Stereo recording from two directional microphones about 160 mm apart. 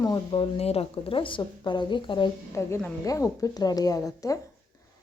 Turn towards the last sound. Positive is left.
turn(degrees=20)  # may be behind; listen again after turning